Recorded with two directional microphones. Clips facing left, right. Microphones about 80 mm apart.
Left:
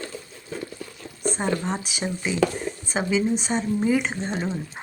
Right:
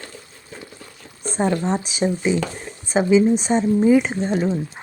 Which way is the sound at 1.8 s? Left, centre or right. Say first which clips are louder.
Right 8 dB; right.